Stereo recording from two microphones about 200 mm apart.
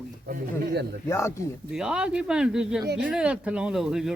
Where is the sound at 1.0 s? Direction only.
15° left (ahead or behind).